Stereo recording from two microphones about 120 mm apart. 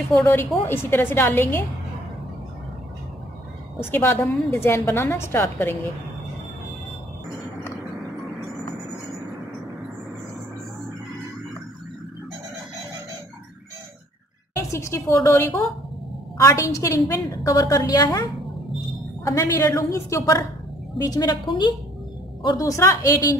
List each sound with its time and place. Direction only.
0.1 s a woman's voice: 25° left (ahead or behind)
3.9 s a woman's voice: 20° left (ahead or behind)
14.7 s a woman's voice: 25° left (ahead or behind)
19.2 s a woman's voice: 25° left (ahead or behind)